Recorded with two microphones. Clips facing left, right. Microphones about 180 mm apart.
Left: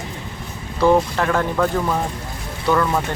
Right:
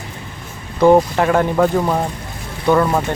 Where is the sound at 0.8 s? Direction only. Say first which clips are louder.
Right 5 dB; 15° right (ahead or behind).